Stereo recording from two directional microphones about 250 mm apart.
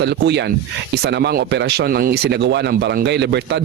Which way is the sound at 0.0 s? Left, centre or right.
Right.